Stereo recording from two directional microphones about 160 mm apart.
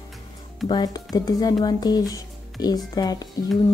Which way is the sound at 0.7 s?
25° left (ahead or behind).